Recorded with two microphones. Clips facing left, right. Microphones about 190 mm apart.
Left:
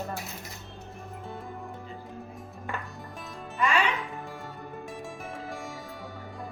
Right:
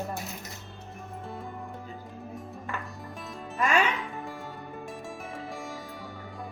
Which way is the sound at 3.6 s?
45° right (ahead or behind).